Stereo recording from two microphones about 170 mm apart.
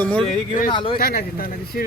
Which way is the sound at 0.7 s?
30° left (ahead or behind).